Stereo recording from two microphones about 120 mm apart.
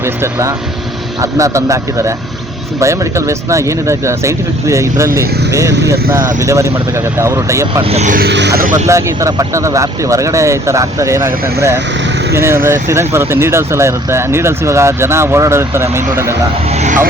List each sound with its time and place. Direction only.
0.0 s speech: 25° right (ahead or behind)
7.7 s speech: 45° right (ahead or behind)
8.9 s speech: 25° right (ahead or behind)
16.6 s speech: 70° right (ahead or behind)